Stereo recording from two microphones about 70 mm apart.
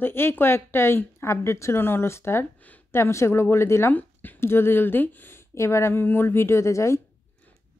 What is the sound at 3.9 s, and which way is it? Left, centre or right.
Speech, left.